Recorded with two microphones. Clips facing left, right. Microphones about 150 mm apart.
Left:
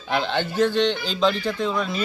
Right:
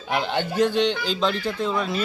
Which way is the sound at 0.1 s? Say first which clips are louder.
Left 1 dB; 5° right (ahead or behind).